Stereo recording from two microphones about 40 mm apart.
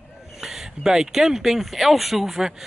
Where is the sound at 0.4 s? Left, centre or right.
Centre.